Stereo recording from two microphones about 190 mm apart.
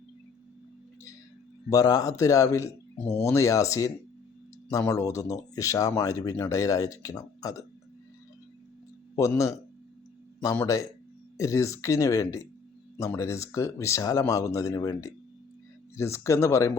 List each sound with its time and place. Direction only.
1.7 s speech: 20° left (ahead or behind)
9.1 s speech: 15° left (ahead or behind)